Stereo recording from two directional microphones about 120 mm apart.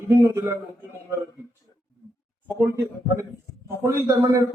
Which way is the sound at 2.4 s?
25° right (ahead or behind).